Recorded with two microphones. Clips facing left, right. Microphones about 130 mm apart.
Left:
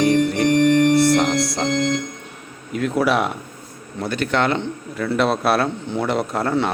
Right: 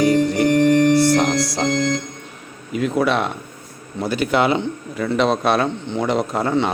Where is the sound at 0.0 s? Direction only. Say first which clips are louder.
Right 1 dB; centre (ahead or behind).